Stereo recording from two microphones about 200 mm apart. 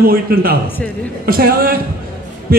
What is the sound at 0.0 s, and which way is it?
A man's voice, 50° right (ahead or behind).